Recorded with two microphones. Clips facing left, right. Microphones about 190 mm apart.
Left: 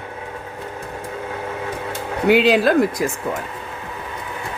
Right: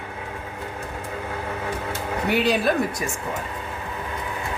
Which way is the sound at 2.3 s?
90° left.